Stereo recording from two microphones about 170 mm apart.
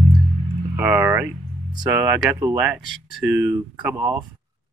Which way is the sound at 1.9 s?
15° right (ahead or behind).